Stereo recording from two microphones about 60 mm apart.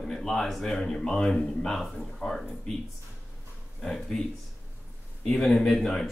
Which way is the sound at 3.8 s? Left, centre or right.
Centre.